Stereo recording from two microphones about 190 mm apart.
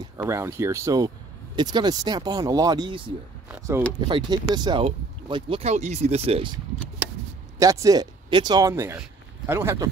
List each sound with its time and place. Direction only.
0.2 s speech: 15° right (ahead or behind)
3.4 s speech: 10° right (ahead or behind)
4.1 s speech: 20° right (ahead or behind)
7.5 s speech: 15° right (ahead or behind)